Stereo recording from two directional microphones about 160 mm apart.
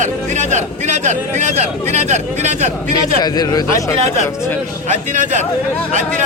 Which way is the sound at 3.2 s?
25° left (ahead or behind).